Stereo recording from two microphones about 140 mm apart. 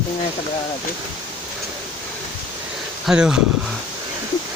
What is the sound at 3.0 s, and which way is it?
Speech, 5° right (ahead or behind).